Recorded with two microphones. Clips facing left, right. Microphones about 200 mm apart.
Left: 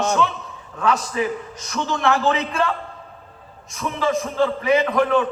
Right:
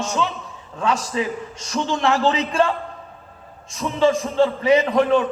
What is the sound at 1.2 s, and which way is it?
A man's voice, 25° right (ahead or behind).